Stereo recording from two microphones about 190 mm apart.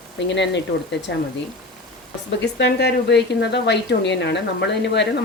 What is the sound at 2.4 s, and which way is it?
A woman's voice, 65° left (ahead or behind).